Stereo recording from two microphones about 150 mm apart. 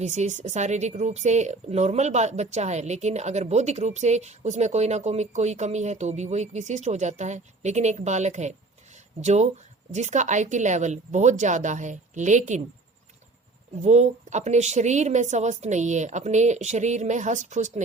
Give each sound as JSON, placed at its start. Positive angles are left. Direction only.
{"t": 0.0, "sound": "speech", "side_deg": -50}
{"t": 13.8, "sound": "speech", "side_deg": -50}